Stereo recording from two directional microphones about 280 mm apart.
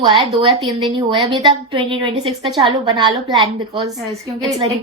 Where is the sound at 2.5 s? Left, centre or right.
Centre.